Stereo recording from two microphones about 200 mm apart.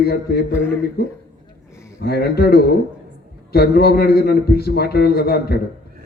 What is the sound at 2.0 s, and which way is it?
A man's voice, 50° left (ahead or behind).